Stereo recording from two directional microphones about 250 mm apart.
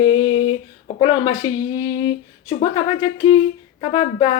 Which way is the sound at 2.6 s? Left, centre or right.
Centre.